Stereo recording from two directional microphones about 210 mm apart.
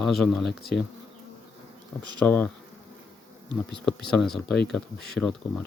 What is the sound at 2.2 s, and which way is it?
Bee, 10° left (ahead or behind).